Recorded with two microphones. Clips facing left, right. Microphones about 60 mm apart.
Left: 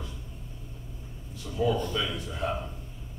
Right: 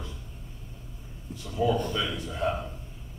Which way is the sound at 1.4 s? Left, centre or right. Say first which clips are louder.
Right 1 dB; centre.